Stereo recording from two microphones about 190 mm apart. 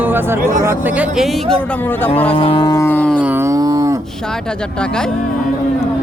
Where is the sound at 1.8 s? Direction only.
10° left (ahead or behind).